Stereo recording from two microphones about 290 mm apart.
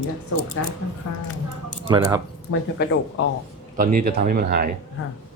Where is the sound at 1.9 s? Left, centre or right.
Centre.